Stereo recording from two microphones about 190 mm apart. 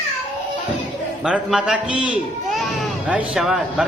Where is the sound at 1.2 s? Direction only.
5° right (ahead or behind).